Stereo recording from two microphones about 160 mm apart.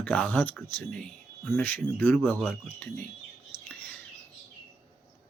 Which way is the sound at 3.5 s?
35° left (ahead or behind).